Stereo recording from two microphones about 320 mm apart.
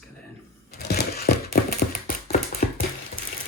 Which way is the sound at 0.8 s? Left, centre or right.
Left.